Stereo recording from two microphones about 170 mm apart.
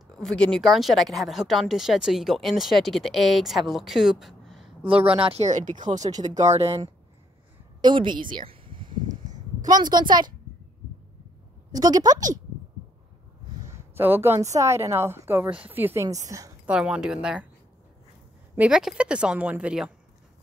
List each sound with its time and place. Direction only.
0.2 s speech: 5° left (ahead or behind)
4.8 s speech: 30° right (ahead or behind)
7.8 s a sound: 25° right (ahead or behind)
9.1 s a sound: 45° right (ahead or behind)
9.7 s a woman's voice: 25° right (ahead or behind)
11.7 s a woman's voice: 25° right (ahead or behind)
13.7 s a woman's voice: 15° right (ahead or behind)
16.6 s speech: 5° right (ahead or behind)
18.6 s speech: 5° right (ahead or behind)